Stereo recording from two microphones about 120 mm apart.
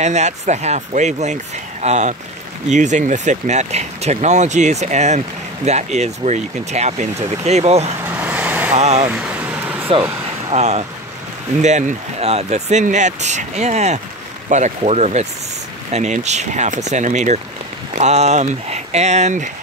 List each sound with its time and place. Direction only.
0.0 s speech: 75° right (ahead or behind)
2.7 s speech: 90° right; by 7.9 s 65° right (ahead or behind)
8.0 s vehicle: 15° right (ahead or behind)
8.7 s speech: 65° right (ahead or behind)
9.1 s vehicle: 10° right (ahead or behind)
10.5 s speech: 65° right (ahead or behind); by 17.4 s 85° right
17.9 s speech: 70° right (ahead or behind)